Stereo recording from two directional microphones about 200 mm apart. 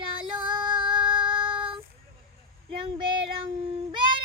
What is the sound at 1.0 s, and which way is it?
Music, 5° right (ahead or behind).